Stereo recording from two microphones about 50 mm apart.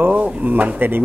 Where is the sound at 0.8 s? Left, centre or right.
Right.